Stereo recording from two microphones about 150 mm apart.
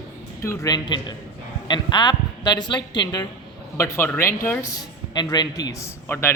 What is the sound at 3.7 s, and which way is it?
A man's voice, 15° left (ahead or behind).